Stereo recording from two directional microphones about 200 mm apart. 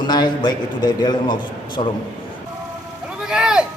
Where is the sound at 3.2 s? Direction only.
5° right (ahead or behind).